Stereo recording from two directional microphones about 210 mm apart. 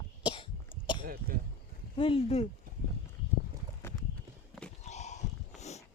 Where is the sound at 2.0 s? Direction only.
25° left (ahead or behind).